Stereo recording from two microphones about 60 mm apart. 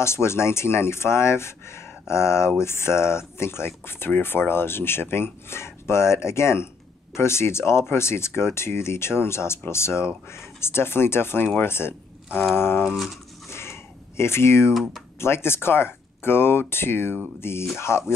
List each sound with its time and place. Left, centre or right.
0.0 s speech: left
12.8 s speech: centre
13.5 s a sound: left
14.7 s speech: centre
15.1 s speech: left